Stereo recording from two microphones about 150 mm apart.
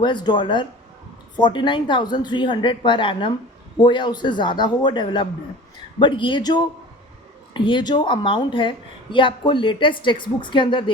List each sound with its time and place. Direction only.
0.0 s a woman's voice: 30° left (ahead or behind)